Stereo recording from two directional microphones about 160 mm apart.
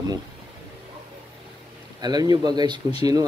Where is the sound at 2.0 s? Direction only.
25° right (ahead or behind).